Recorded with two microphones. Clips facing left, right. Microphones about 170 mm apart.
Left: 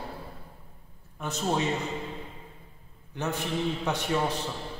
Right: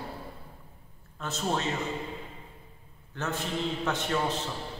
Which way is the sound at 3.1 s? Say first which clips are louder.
Left 2 dB; 15° left (ahead or behind).